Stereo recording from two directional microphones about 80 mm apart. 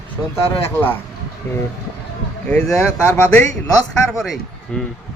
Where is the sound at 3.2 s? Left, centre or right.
Left.